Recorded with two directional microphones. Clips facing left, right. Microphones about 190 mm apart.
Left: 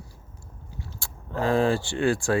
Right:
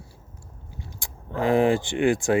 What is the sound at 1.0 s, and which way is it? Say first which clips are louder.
Speech: right 2 dB; 15° right (ahead or behind).